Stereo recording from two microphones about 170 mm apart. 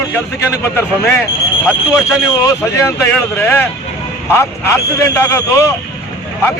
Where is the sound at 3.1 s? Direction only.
10° left (ahead or behind).